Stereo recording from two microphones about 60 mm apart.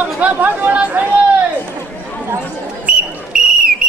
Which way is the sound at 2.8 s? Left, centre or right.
Centre.